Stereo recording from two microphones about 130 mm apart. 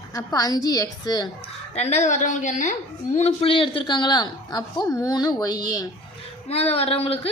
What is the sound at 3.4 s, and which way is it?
Speech, 45° left (ahead or behind).